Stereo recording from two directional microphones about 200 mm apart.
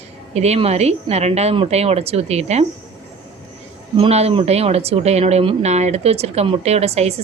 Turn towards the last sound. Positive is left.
turn(degrees=-30)  # may be behind; listen again after turning